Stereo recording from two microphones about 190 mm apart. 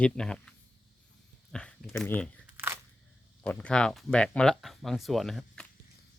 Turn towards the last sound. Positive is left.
turn(degrees=0)  # may be behind; listen again after turning